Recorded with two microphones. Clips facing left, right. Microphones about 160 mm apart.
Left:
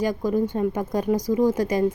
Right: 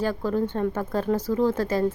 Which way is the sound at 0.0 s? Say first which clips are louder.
Left 2 dB; 15° left (ahead or behind).